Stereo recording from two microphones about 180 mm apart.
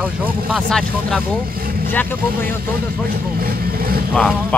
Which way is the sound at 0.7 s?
5° left (ahead or behind).